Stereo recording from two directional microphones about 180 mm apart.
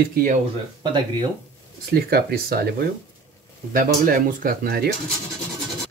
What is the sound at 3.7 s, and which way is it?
Speech, 50° right (ahead or behind).